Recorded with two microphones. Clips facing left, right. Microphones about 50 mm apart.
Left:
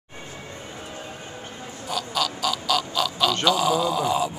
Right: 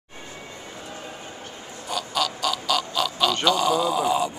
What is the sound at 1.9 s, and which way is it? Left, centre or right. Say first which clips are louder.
Speech: even; centre.